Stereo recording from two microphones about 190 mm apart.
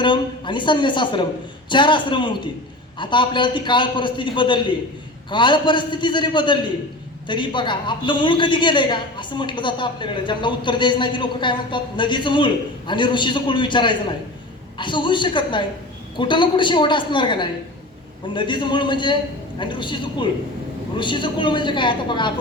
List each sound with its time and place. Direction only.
0.0 s a woman's voice: 25° left (ahead or behind)